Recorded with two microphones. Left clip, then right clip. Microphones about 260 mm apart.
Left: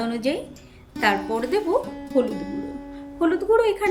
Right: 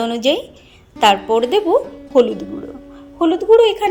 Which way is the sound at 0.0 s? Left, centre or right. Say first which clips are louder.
Right 9 dB; centre.